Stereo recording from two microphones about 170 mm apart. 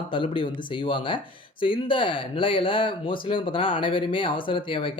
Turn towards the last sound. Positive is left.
turn(degrees=30)  # may be behind; listen again after turning